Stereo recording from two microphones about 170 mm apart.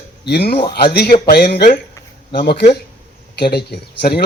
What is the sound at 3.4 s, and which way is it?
Speech, 70° left (ahead or behind).